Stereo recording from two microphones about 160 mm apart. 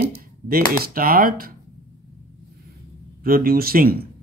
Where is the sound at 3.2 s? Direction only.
65° right (ahead or behind).